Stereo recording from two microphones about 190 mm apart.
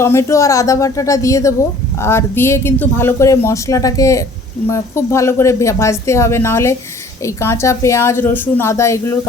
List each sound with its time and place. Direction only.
0.0 s speech: 15° left (ahead or behind)